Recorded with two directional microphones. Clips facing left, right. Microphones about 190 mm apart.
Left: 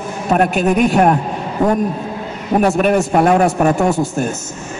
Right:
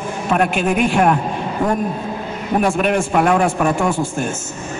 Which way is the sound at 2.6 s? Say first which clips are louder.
Left 4 dB; 40° left (ahead or behind).